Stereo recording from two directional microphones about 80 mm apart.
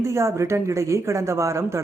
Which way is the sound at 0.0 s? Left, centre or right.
Right.